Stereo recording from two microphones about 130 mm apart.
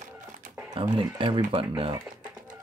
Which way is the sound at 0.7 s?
35° right (ahead or behind).